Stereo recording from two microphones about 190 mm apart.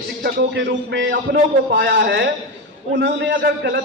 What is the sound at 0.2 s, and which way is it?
A man's voice, 65° right (ahead or behind).